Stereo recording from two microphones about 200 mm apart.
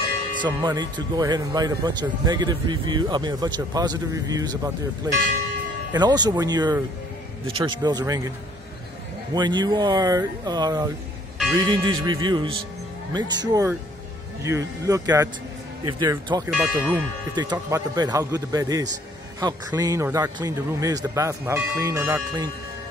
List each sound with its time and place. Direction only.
0.4 s speech: 20° right (ahead or behind)
9.3 s a man's voice: 20° right (ahead or behind)
16.4 s speech: 5° right (ahead or behind)
17.4 s a man's voice: 15° right (ahead or behind)